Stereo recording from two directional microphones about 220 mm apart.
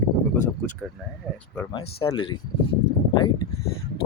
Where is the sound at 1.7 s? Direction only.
25° left (ahead or behind).